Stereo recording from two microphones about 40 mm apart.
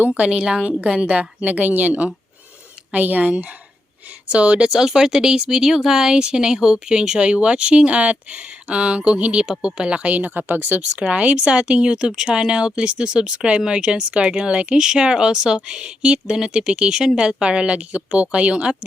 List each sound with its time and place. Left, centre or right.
0.1 s speech: right
1.4 s speech: right
4.3 s speech: right
4.7 s speech: centre; by 9.4 s right
9.4 s speech: centre; by 10.8 s right
11.1 s speech: right